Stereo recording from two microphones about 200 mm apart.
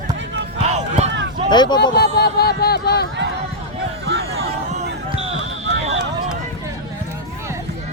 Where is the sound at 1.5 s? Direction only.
20° left (ahead or behind).